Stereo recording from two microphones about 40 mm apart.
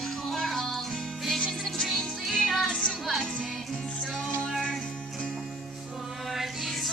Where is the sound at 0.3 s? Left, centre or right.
Centre.